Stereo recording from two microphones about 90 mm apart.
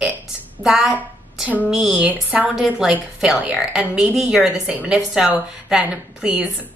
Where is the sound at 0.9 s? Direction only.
20° right (ahead or behind).